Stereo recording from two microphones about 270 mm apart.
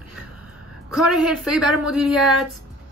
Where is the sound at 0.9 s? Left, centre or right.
Centre.